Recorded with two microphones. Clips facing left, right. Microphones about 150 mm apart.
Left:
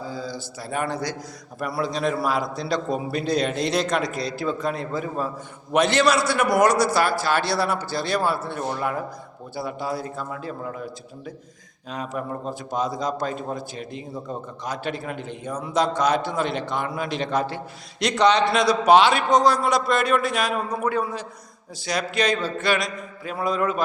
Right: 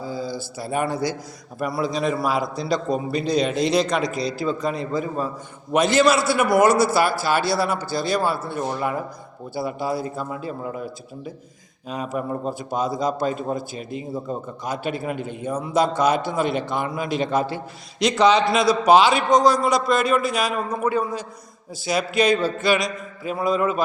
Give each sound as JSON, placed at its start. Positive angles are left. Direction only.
{"t": 0.1, "sound": "a man's voice", "side_deg": -10}
{"t": 11.9, "sound": "a man's voice", "side_deg": -10}